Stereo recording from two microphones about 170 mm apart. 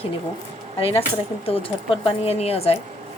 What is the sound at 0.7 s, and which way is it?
A woman's voice, 35° left (ahead or behind).